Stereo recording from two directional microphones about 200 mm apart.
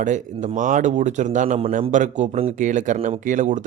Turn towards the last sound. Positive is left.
turn(degrees=-40)  # may be behind; listen again after turning